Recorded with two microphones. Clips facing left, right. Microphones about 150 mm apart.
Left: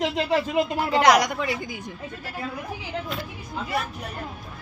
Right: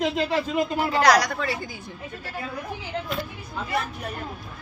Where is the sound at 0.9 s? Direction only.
20° left (ahead or behind).